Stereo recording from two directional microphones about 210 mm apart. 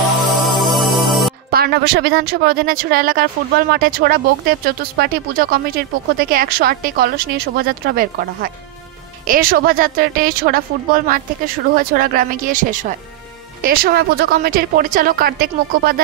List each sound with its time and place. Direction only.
0.2 s music: centre (ahead or behind)
1.5 s speech: 45° right (ahead or behind)